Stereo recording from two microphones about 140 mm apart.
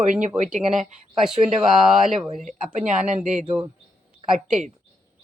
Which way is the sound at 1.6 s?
Centre (ahead or behind).